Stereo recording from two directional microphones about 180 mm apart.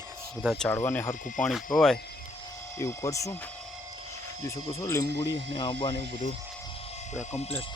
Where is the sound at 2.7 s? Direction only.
15° left (ahead or behind).